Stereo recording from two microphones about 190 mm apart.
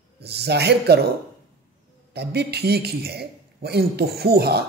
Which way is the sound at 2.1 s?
60° right (ahead or behind).